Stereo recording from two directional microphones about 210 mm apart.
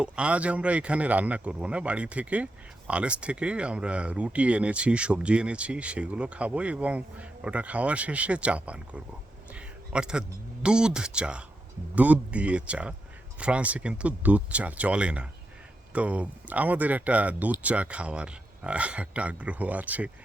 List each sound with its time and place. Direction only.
0.0 s speech: 5° right (ahead or behind)